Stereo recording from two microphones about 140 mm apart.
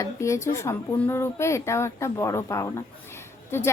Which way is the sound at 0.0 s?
20° left (ahead or behind).